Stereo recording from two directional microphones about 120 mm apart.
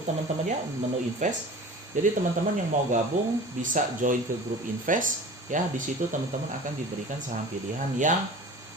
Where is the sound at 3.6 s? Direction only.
90° right.